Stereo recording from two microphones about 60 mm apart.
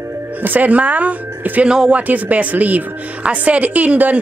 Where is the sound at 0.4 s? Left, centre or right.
Right.